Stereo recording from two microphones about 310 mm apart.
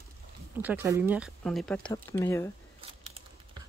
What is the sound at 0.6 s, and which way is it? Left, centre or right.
Speech, centre.